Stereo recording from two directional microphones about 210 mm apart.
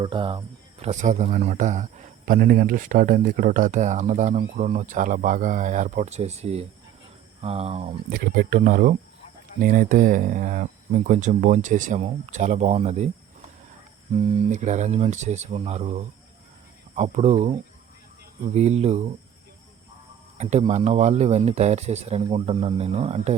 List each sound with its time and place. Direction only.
0.0 s speech: 25° right (ahead or behind)
8.4 s speech: 40° right (ahead or behind)
14.2 s speech: 25° right (ahead or behind)
20.4 s speech: 30° right (ahead or behind)